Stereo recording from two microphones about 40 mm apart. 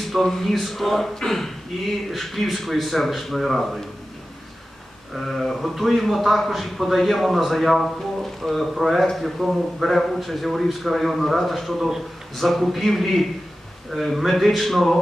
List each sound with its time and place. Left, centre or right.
0.0 s a man's voice: centre
5.1 s a man's voice: centre